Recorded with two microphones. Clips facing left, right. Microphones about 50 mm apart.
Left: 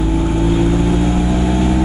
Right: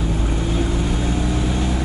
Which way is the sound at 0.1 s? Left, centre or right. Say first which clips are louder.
Left 7 dB; centre.